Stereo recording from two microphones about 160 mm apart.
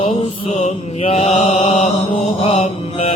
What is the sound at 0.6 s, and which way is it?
Mantra, 45° left (ahead or behind).